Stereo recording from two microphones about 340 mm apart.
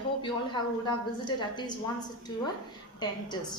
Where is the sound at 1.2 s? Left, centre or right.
Centre.